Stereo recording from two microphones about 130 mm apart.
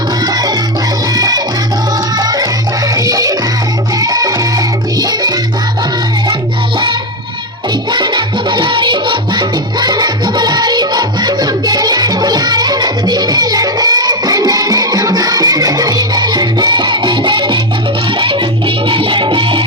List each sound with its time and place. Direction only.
1.1 s music: 30° right (ahead or behind)
7.9 s music: 35° right (ahead or behind)
18.9 s music: 40° right (ahead or behind)